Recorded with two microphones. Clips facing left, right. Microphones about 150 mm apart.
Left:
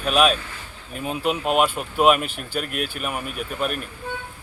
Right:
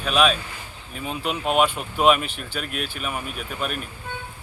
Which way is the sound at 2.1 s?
45° left (ahead or behind).